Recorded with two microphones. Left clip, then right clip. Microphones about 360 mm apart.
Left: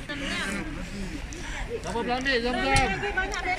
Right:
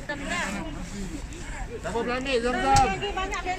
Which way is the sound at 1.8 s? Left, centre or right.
Right.